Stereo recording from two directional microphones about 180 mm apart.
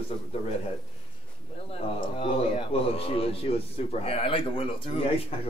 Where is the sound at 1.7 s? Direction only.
30° left (ahead or behind).